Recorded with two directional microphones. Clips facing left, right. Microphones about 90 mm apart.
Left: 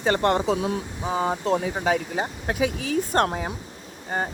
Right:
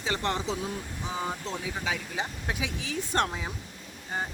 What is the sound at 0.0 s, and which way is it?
Speech, 55° left (ahead or behind).